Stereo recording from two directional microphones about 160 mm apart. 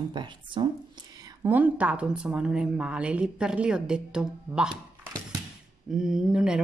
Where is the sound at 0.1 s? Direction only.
30° right (ahead or behind).